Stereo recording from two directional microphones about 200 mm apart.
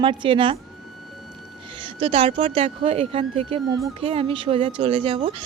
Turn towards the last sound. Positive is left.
turn(degrees=-25)  # may be behind; listen again after turning